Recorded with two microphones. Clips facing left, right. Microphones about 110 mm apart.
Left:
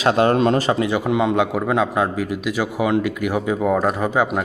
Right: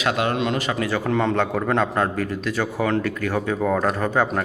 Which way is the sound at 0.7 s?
20° left (ahead or behind).